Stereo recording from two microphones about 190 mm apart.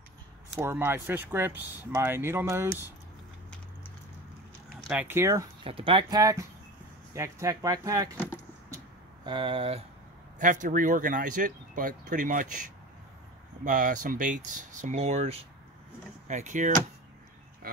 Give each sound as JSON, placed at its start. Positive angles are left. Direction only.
{"t": 0.6, "sound": "speech", "side_deg": -10}
{"t": 4.8, "sound": "speech", "side_deg": -10}
{"t": 5.6, "sound": "speech", "side_deg": -30}
{"t": 9.2, "sound": "speech", "side_deg": -25}
{"t": 10.4, "sound": "speech", "side_deg": -45}
{"t": 13.7, "sound": "speech", "side_deg": -45}